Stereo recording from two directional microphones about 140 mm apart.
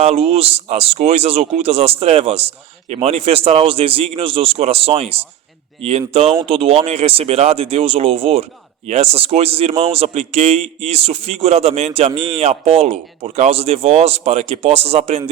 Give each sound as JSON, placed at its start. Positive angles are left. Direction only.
{"t": 0.0, "sound": "speech", "side_deg": -45}